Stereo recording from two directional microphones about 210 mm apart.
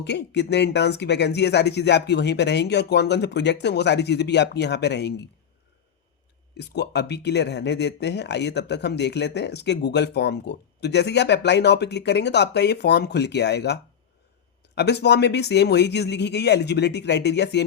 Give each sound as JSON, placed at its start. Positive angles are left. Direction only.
{"t": 0.0, "sound": "speech", "side_deg": 55}
{"t": 6.6, "sound": "speech", "side_deg": 55}
{"t": 14.8, "sound": "speech", "side_deg": 55}